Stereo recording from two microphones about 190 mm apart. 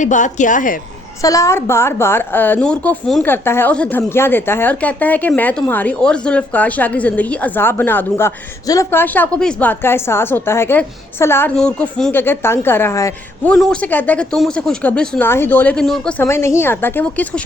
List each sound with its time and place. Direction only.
0.0 s a woman's voice: 40° left (ahead or behind)
1.2 s a woman's voice: 15° left (ahead or behind)